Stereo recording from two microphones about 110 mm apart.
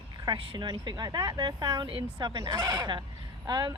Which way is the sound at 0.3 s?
40° right (ahead or behind).